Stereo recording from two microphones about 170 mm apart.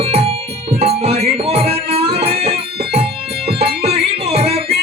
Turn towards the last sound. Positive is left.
turn(degrees=-35)  # may be behind; listen again after turning